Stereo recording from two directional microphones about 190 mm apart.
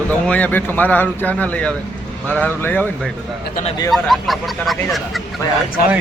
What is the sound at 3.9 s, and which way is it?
Speech, centre (ahead or behind).